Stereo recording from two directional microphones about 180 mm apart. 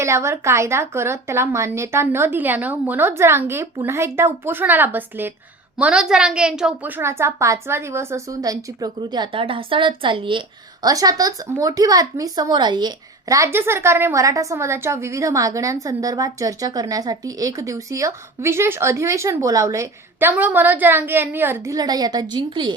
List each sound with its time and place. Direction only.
0.0 s a woman's voice: 15° right (ahead or behind)